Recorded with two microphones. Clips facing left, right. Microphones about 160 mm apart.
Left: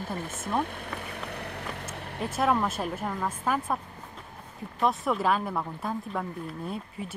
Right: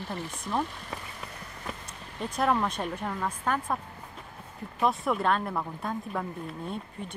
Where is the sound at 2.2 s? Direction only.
5° left (ahead or behind).